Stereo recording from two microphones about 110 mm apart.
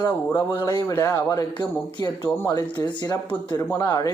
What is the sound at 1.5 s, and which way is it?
Speech, 40° left (ahead or behind).